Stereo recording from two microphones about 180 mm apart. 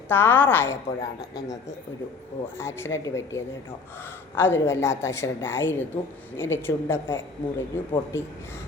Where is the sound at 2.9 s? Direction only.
15° left (ahead or behind).